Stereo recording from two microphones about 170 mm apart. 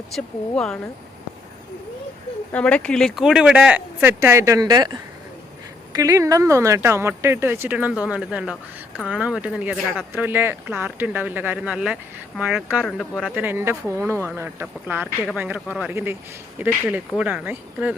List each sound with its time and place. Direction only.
0.1 s speech: 5° left (ahead or behind)
2.5 s speech: 10° left (ahead or behind); by 4.9 s 20° right (ahead or behind)
5.9 s speech: 20° right (ahead or behind)
9.7 s speech: centre (ahead or behind)
10.1 s speech: 10° right (ahead or behind)
13.3 s speech: 10° right (ahead or behind)